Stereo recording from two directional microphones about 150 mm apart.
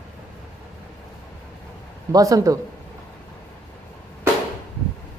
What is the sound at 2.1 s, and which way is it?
Speech, 25° right (ahead or behind).